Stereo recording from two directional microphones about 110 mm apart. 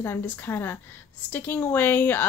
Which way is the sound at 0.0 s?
20° left (ahead or behind).